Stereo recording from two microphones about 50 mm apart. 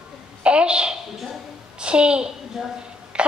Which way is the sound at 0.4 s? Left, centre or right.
Right.